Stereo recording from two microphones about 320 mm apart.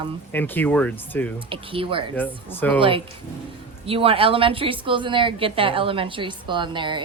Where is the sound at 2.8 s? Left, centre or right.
Centre.